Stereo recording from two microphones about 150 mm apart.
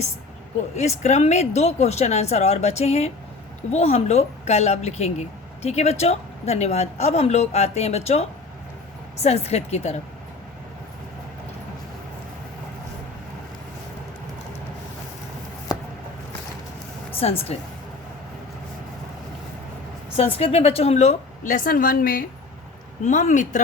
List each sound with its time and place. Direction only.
0.8 s a woman's voice: 50° left (ahead or behind)
17.1 s speech: 40° left (ahead or behind)
20.1 s a woman's voice: 40° left (ahead or behind); by 22.2 s 75° left (ahead or behind)
23.0 s speech: 55° left (ahead or behind)